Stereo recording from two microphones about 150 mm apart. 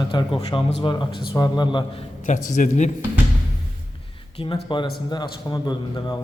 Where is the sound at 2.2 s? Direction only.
60° left (ahead or behind).